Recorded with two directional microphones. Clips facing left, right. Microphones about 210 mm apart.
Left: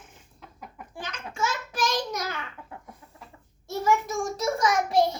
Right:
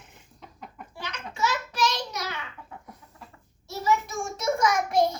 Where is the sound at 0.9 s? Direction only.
50° left (ahead or behind).